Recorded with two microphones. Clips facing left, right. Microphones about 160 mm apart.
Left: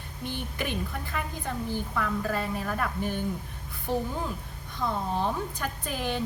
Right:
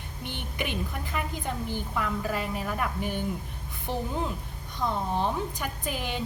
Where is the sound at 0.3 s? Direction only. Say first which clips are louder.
Left 1 dB; 20° right (ahead or behind).